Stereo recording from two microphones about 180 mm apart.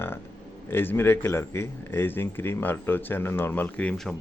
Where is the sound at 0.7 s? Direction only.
10° left (ahead or behind).